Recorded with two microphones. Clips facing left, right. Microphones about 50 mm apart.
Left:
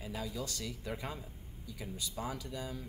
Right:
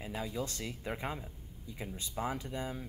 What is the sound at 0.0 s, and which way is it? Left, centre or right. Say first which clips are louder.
Speech: right 2 dB; right.